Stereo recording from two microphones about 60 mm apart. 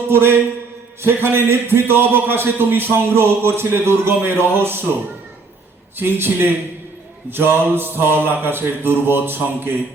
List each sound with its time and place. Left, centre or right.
0.1 s a man's voice: right
6.0 s a man's voice: right